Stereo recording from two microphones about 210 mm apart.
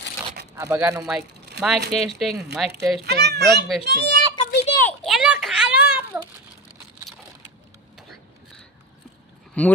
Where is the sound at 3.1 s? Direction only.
50° right (ahead or behind).